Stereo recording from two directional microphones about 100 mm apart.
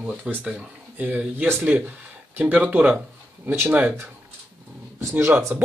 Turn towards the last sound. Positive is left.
turn(degrees=-15)  # may be behind; listen again after turning